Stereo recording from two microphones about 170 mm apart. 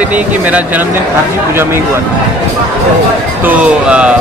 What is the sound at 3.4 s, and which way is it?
Speech, 5° right (ahead or behind).